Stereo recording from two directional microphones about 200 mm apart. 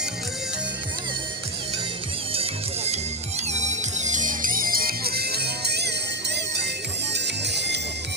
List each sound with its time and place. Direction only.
2.3 s music: 30° right (ahead or behind); by 5.9 s 55° right (ahead or behind)
7.1 s music: 60° right (ahead or behind)